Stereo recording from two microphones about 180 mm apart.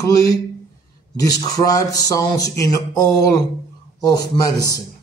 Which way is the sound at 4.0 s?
20° left (ahead or behind).